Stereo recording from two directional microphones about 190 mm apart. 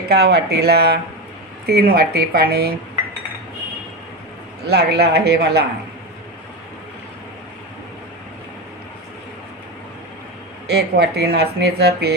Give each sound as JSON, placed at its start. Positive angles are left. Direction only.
{"t": 0.1, "sound": "speech", "side_deg": -60}
{"t": 4.6, "sound": "speech", "side_deg": -60}
{"t": 10.7, "sound": "speech", "side_deg": -60}